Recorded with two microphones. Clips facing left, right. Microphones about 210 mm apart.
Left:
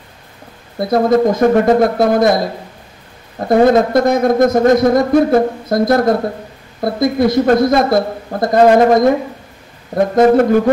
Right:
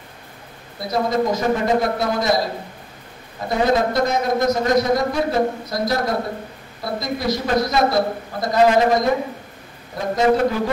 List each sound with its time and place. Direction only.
0.7 s a man's voice: 50° left (ahead or behind)